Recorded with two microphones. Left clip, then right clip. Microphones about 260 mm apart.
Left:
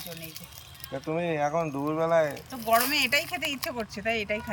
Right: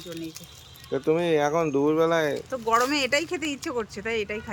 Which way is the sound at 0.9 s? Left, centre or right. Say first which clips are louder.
Right 7 dB; centre.